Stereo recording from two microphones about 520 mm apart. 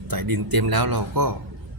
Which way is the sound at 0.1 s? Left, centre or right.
Right.